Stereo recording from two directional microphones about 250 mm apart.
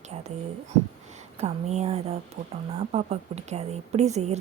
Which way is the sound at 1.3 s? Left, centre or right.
Right.